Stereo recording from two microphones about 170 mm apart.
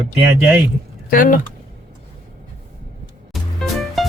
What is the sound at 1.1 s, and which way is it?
Speech, 50° left (ahead or behind).